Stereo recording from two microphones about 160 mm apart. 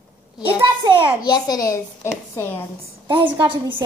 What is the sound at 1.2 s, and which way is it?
A child's voice, 25° left (ahead or behind).